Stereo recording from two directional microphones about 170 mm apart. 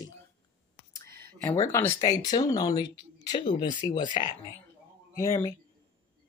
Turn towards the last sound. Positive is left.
turn(degrees=15)  # may be behind; listen again after turning